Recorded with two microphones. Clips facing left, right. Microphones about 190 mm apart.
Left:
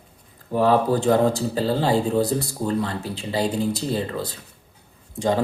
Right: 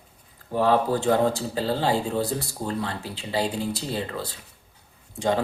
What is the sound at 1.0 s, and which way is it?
Speech, 40° left (ahead or behind).